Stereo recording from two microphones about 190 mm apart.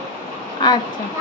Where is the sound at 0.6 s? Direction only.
25° left (ahead or behind).